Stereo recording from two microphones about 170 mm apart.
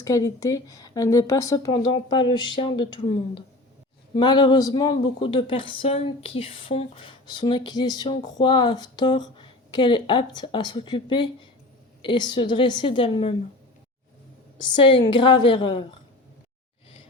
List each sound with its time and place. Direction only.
0.0 s speech: 20° left (ahead or behind)
14.6 s speech: 30° left (ahead or behind)